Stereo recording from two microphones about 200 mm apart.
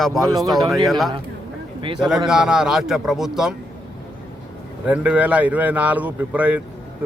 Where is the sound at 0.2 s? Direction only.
20° right (ahead or behind).